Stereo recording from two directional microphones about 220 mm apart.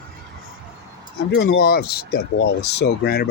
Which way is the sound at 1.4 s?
45° left (ahead or behind).